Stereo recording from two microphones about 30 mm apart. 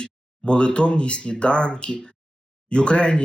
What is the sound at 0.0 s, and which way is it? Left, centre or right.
Speech, left.